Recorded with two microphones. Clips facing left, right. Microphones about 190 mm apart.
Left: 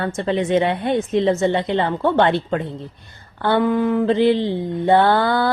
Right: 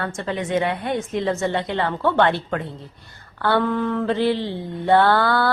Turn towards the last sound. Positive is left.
turn(degrees=20)  # may be behind; listen again after turning